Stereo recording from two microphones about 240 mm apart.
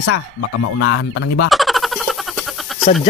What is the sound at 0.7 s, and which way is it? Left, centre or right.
Speech, left.